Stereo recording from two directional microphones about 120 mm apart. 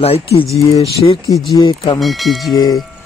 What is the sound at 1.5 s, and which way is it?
Speech, 35° left (ahead or behind).